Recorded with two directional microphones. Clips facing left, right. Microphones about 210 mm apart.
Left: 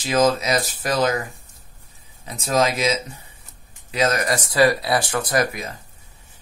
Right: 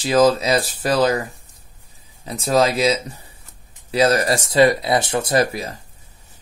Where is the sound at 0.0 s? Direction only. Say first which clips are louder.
Right 3 dB; 30° right (ahead or behind).